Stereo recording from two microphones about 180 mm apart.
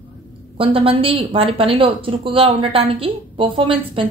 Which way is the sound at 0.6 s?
30° right (ahead or behind).